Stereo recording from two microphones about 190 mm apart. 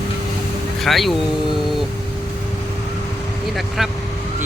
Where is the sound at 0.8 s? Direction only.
Centre (ahead or behind).